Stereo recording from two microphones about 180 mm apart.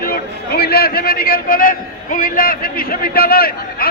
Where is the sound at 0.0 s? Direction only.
60° left (ahead or behind).